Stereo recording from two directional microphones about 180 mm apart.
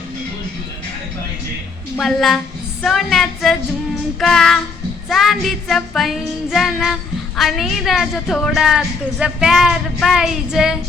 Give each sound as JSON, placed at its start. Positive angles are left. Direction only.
{"t": 2.0, "sound": "a woman's voice", "side_deg": 0}